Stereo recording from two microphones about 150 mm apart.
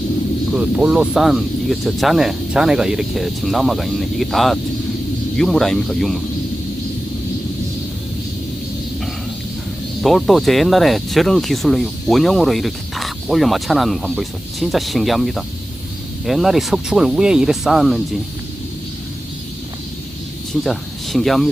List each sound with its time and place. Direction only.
0.5 s speech: 5° right (ahead or behind)
10.0 s speech: centre (ahead or behind)
20.5 s speech: centre (ahead or behind)